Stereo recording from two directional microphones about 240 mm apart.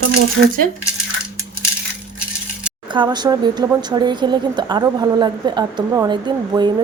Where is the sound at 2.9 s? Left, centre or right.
Centre.